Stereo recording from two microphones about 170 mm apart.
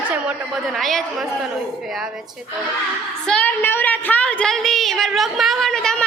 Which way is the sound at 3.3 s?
10° left (ahead or behind).